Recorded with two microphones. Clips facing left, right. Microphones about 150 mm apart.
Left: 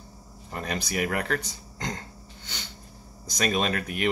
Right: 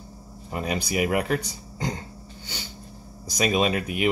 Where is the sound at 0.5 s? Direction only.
10° right (ahead or behind).